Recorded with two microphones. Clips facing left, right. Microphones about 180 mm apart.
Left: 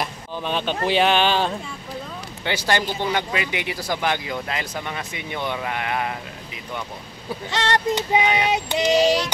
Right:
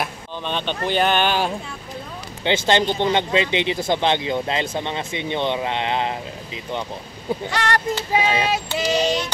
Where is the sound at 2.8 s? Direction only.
10° left (ahead or behind).